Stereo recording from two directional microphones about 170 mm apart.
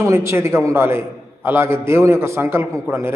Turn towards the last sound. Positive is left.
turn(degrees=-15)  # may be behind; listen again after turning